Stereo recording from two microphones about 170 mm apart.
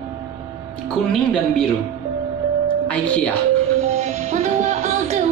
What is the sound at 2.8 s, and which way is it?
Speech, 10° left (ahead or behind).